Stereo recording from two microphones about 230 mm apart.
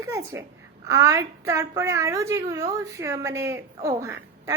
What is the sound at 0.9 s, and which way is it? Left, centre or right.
A woman's voice, centre.